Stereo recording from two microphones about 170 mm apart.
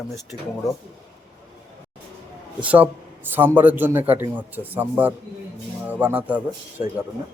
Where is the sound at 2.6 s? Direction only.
10° right (ahead or behind).